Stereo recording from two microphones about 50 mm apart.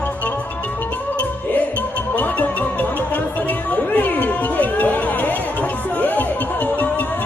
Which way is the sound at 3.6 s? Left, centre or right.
Left.